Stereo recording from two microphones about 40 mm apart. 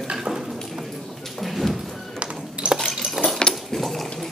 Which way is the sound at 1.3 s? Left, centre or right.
Centre.